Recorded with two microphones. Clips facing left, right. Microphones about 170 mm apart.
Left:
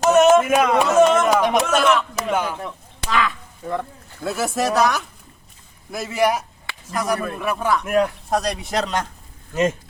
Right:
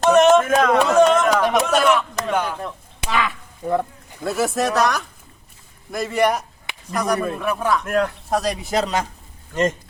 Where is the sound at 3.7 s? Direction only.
15° right (ahead or behind).